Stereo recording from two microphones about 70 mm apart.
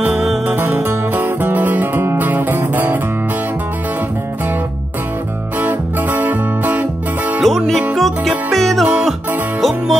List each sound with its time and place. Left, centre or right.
0.5 s music: right
5.6 s music: right
7.4 s music: centre